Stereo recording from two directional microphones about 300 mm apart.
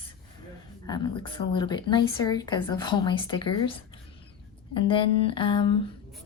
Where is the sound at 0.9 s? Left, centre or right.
Centre.